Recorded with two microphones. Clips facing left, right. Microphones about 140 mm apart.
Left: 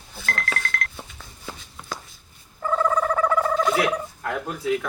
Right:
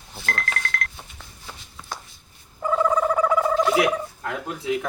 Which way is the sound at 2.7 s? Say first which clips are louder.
Right 1 dB; 10° right (ahead or behind).